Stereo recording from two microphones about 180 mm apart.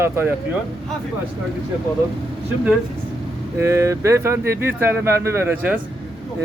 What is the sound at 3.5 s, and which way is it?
A man's voice, 15° right (ahead or behind).